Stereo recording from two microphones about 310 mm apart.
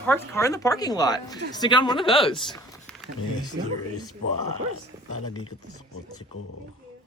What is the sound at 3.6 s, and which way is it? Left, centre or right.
Speech, right.